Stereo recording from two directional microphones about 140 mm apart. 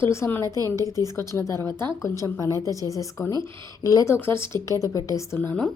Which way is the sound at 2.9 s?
20° left (ahead or behind).